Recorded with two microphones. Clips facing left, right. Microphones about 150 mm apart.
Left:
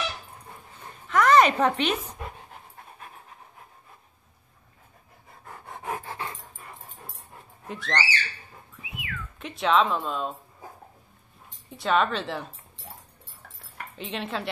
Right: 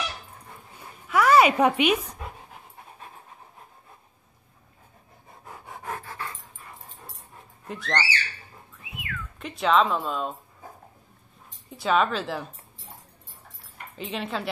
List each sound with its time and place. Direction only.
0.7 s a sound: 10° right (ahead or behind)
5.7 s pant: 5° left (ahead or behind)
6.0 s dog: 25° left (ahead or behind)
7.6 s speech: centre (ahead or behind)
8.8 s whistling: centre (ahead or behind)
11.7 s speech: centre (ahead or behind)
13.9 s speech: centre (ahead or behind)